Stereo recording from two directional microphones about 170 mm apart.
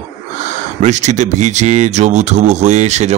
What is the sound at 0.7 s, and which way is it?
Speech, 45° right (ahead or behind).